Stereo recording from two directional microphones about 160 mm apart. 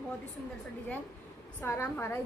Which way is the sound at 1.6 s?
15° left (ahead or behind).